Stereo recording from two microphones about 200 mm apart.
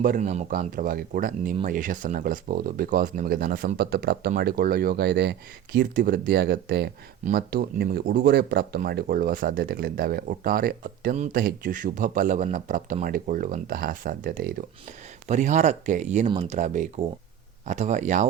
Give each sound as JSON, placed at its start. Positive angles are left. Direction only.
{"t": 0.0, "sound": "speech", "side_deg": -40}
{"t": 15.3, "sound": "speech", "side_deg": -35}